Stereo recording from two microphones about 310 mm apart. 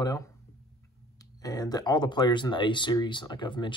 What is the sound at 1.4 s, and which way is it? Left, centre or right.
Speech, centre.